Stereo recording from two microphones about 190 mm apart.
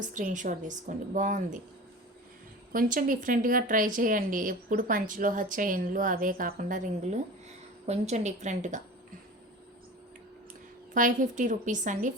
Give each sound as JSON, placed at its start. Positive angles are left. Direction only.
{"t": 0.0, "sound": "a woman's voice", "side_deg": -40}
{"t": 2.7, "sound": "a woman's voice", "side_deg": -45}
{"t": 10.9, "sound": "a woman's voice", "side_deg": -45}